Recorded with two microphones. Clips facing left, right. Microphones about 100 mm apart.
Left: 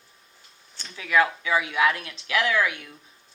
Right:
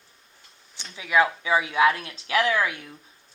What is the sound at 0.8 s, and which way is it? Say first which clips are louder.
Speech: right 1 dB; 20° right (ahead or behind).